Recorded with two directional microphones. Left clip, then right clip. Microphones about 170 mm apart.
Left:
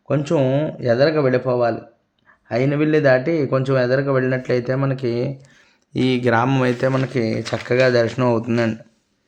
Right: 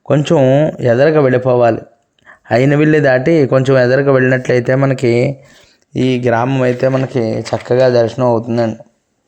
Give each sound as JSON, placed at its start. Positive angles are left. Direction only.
{"t": 0.1, "sound": "a man's voice", "side_deg": -35}
{"t": 5.9, "sound": "speech", "side_deg": -15}